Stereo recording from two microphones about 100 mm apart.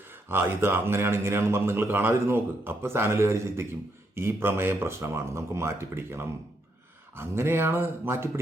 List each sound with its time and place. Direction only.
0.3 s speech: 25° right (ahead or behind)